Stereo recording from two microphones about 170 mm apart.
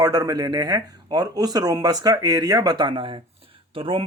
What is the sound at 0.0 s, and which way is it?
Speech, 20° right (ahead or behind).